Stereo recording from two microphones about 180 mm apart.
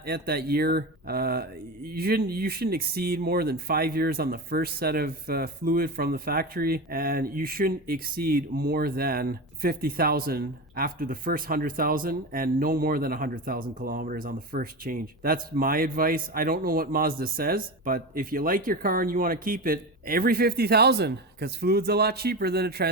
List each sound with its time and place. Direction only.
0.0 s speech: 60° right (ahead or behind)